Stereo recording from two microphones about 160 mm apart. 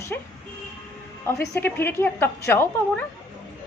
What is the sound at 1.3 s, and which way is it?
A woman's voice, 15° left (ahead or behind).